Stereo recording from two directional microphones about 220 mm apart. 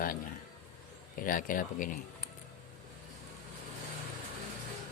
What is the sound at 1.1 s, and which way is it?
Speech, 40° left (ahead or behind).